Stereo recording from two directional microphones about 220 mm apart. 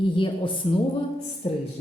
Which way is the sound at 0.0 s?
25° left (ahead or behind).